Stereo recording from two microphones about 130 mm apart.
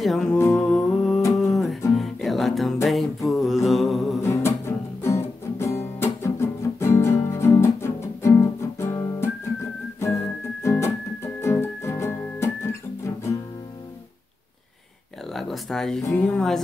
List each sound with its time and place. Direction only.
0.0 s music: centre (ahead or behind)
0.4 s music: 20° left (ahead or behind)
0.7 s music: centre (ahead or behind)
4.2 s music: 20° left (ahead or behind)
13.0 s guitar: 20° left (ahead or behind)
15.3 s music: centre (ahead or behind)